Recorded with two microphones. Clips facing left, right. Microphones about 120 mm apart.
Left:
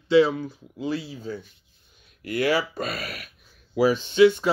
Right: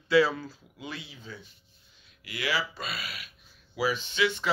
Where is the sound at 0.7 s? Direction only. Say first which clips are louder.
Left 13 dB; 35° left (ahead or behind).